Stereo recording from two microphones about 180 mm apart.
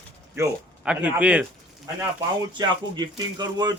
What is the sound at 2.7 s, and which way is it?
Speech, 25° right (ahead or behind).